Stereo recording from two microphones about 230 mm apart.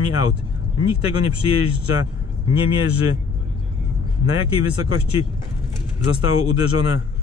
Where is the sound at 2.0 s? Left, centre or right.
Left.